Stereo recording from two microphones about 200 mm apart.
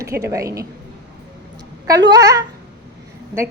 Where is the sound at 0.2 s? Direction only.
15° right (ahead or behind).